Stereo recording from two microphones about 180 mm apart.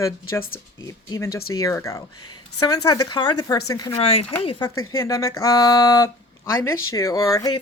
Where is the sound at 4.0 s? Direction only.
35° left (ahead or behind).